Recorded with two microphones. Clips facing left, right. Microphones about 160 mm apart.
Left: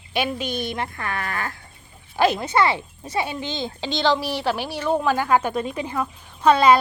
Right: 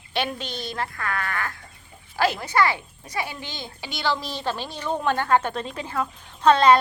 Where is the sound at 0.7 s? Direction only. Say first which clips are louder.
Left 1 dB; 20° left (ahead or behind).